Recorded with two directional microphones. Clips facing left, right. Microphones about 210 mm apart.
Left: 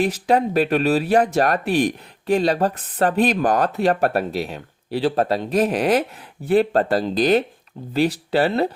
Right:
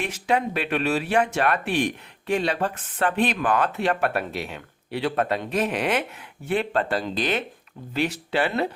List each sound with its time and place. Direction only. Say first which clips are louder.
0.0 s speech: left 6 dB; 35° left (ahead or behind)